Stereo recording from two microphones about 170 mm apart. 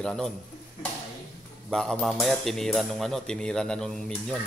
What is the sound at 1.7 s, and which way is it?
A man's voice, centre (ahead or behind).